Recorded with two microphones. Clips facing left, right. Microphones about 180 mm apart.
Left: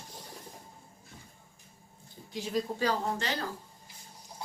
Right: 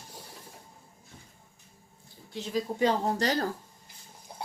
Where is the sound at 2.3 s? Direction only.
10° left (ahead or behind).